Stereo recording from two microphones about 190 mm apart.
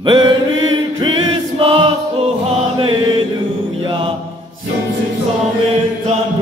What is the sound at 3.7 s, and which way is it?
Mantra, 25° right (ahead or behind).